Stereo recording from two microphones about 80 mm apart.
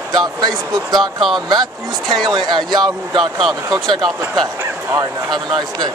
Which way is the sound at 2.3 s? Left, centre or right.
Right.